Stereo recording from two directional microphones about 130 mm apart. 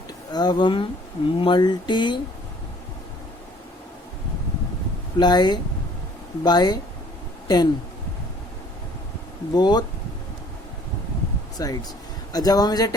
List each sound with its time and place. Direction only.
0.3 s speech: 35° left (ahead or behind)
5.1 s speech: 35° left (ahead or behind)
9.6 s speech: 30° left (ahead or behind)
11.5 s speech: 30° left (ahead or behind)